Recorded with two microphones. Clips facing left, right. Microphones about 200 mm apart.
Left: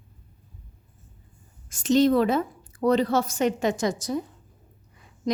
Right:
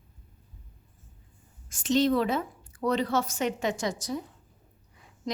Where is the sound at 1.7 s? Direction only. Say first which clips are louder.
Left 5 dB; 45° left (ahead or behind).